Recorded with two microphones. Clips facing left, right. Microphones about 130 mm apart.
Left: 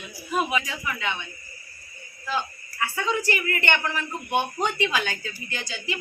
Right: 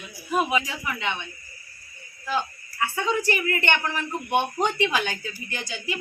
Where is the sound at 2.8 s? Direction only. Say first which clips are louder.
Right 1 dB; 20° right (ahead or behind).